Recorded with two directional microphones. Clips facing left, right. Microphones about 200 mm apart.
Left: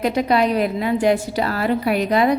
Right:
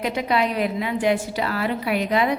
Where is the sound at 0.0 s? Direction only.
40° left (ahead or behind).